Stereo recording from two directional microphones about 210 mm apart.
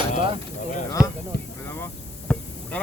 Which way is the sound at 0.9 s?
15° left (ahead or behind).